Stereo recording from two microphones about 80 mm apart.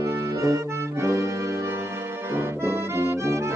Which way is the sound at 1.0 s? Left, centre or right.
Right.